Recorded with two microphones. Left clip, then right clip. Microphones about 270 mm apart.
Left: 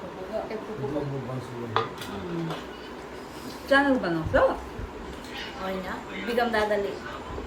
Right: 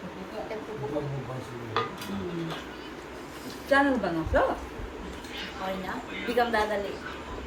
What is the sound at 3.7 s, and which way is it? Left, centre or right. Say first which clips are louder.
Speech: left 2 dB; centre.